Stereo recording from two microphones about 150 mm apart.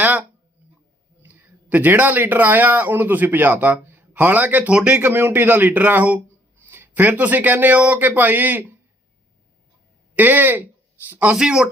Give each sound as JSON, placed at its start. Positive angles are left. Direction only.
{"t": 0.0, "sound": "a sound", "side_deg": -10}
{"t": 1.2, "sound": "speech", "side_deg": -10}
{"t": 10.2, "sound": "speech", "side_deg": -10}